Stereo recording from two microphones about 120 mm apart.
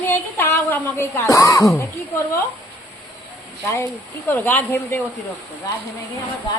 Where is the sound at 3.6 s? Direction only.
25° left (ahead or behind).